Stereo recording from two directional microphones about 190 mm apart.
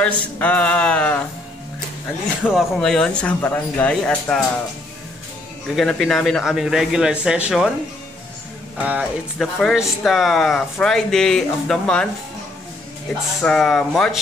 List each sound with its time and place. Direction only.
0.0 s a sound: 5° left (ahead or behind)
2.4 s speech: centre (ahead or behind)
5.8 s speech: 5° left (ahead or behind)
8.7 s speech: 5° right (ahead or behind)
13.4 s speech: 5° left (ahead or behind)